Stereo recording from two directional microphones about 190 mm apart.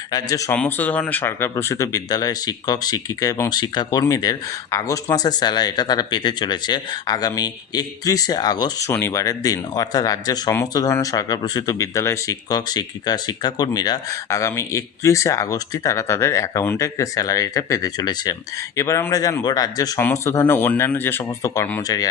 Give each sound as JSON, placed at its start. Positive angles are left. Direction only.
{"t": 0.1, "sound": "speech", "side_deg": 20}
{"t": 0.5, "sound": "speech", "side_deg": 5}